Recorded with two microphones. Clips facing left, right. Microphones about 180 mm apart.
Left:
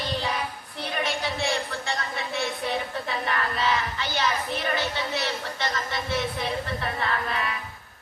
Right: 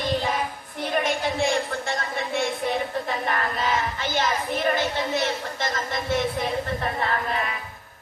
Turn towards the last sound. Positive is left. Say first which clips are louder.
# right 2 dB
turn(degrees=-40)  # may be behind; listen again after turning